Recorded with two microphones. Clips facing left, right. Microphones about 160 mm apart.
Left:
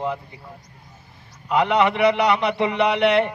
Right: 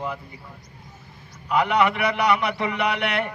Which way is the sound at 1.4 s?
25° left (ahead or behind).